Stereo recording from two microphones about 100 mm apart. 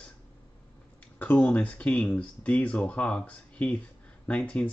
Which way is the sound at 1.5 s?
15° left (ahead or behind).